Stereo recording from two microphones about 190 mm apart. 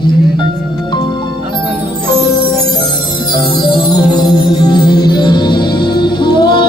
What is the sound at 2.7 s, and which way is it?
Music, 25° left (ahead or behind).